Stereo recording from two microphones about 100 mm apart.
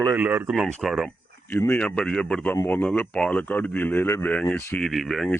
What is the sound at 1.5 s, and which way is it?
Speech, 20° left (ahead or behind).